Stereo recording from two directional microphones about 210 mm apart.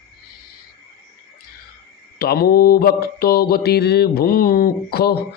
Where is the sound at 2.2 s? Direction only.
45° left (ahead or behind).